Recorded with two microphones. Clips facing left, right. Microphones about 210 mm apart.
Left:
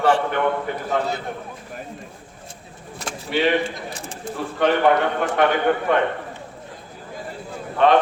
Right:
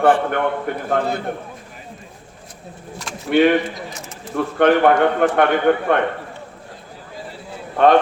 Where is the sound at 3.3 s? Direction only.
55° right (ahead or behind).